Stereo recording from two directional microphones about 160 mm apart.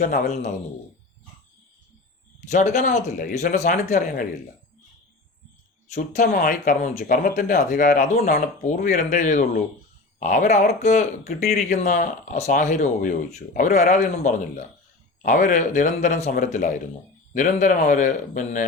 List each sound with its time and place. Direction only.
0.0 s speech: 50° left (ahead or behind)
2.5 s speech: 50° left (ahead or behind)
5.9 s speech: 55° left (ahead or behind)